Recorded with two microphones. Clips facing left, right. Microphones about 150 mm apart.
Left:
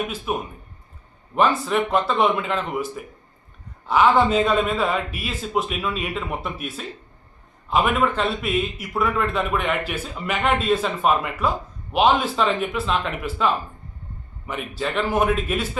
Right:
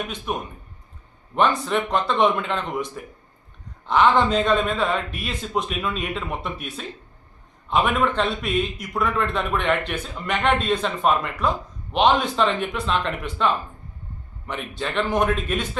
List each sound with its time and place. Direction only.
0.3 s a man's voice: 5° left (ahead or behind)